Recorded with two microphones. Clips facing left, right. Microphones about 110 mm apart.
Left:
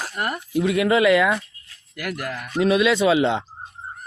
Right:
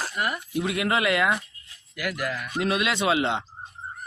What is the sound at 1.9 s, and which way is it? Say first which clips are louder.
Speech: even; 50° left (ahead or behind).